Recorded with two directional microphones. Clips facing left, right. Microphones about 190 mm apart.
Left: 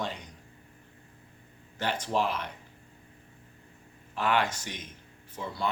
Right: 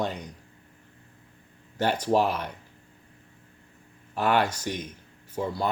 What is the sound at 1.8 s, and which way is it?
Speech, 40° right (ahead or behind).